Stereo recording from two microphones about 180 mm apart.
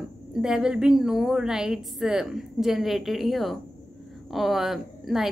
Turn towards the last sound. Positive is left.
turn(degrees=0)  # may be behind; listen again after turning